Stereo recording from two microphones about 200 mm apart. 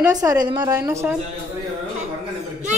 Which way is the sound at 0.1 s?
15° right (ahead or behind).